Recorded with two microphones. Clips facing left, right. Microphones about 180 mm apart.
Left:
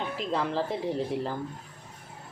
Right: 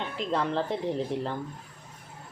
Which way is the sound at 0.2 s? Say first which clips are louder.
Right 2 dB; centre (ahead or behind).